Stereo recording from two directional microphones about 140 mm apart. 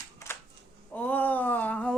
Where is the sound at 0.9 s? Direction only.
10° left (ahead or behind).